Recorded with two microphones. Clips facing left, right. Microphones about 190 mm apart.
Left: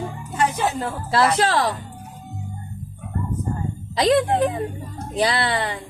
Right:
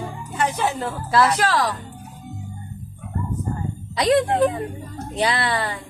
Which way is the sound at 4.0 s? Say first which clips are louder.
Even; 20° left (ahead or behind).